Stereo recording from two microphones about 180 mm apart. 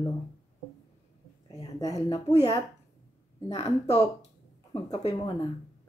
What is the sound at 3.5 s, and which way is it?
Speech, 35° left (ahead or behind).